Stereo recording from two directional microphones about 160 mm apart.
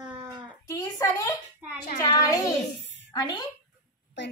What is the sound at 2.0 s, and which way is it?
A woman's voice, 20° left (ahead or behind).